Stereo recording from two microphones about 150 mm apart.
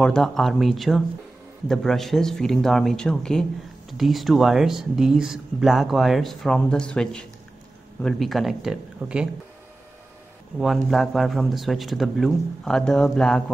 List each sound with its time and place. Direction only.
0.0 s speech: centre (ahead or behind)
10.6 s speech: centre (ahead or behind)